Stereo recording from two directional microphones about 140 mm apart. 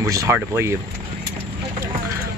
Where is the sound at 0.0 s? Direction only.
20° right (ahead or behind).